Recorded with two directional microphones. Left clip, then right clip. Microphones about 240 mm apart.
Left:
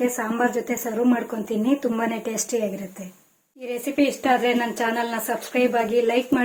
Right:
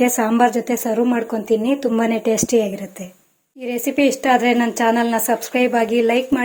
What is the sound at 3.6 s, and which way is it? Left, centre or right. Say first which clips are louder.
Speech: right 5 dB; right.